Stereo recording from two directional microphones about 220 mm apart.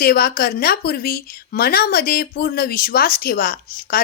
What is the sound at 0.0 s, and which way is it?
Speech, 45° left (ahead or behind).